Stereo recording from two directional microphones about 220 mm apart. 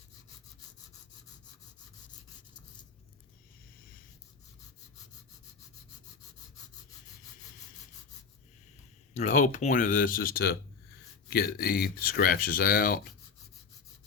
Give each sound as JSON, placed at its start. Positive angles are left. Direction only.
{"t": 9.1, "sound": "speech", "side_deg": 35}